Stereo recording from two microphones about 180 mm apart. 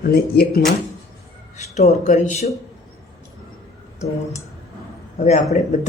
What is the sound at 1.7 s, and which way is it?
Speech, 40° left (ahead or behind).